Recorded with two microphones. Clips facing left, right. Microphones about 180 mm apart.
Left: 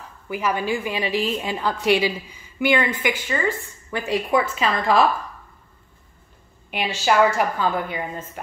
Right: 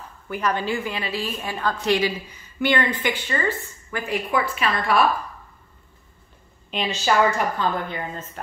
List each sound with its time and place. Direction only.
0.3 s a woman's voice: 10° left (ahead or behind)
3.9 s a woman's voice: 20° left (ahead or behind)
6.7 s a woman's voice: 10° left (ahead or behind)